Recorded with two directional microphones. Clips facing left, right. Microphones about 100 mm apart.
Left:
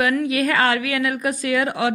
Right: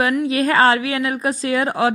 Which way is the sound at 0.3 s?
30° right (ahead or behind).